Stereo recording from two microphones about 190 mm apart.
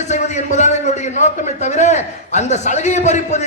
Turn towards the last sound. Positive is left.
turn(degrees=35)  # may be behind; listen again after turning